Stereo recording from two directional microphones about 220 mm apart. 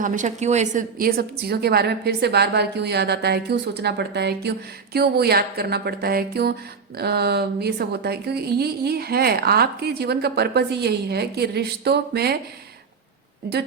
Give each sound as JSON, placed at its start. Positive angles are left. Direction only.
{"t": 0.0, "sound": "a woman's voice", "side_deg": -35}